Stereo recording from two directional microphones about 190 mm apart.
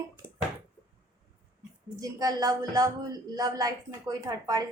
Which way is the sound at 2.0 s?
20° right (ahead or behind).